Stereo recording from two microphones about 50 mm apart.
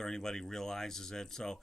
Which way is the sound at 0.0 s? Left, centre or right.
Centre.